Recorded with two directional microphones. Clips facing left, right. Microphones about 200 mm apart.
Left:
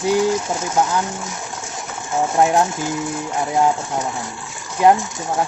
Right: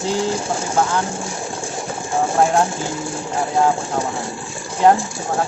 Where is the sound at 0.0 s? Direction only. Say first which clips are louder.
Left 3 dB; 30° right (ahead or behind).